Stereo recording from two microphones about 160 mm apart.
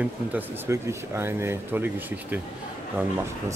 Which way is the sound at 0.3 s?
15° right (ahead or behind).